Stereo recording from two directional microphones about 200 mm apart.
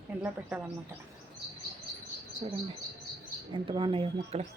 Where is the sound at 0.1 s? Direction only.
10° right (ahead or behind).